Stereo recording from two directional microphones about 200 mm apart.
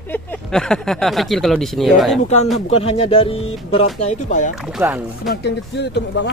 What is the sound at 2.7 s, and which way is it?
Speech, 30° left (ahead or behind).